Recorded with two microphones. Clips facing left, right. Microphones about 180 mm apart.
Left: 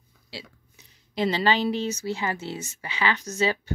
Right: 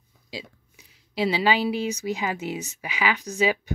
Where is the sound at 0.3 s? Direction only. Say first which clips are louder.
Right 4 dB; 15° right (ahead or behind).